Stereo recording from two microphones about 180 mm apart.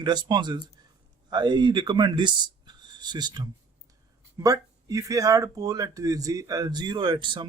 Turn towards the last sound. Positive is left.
turn(degrees=-25)  # may be behind; listen again after turning